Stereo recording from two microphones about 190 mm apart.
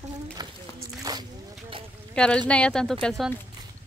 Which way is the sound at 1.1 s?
20° right (ahead or behind).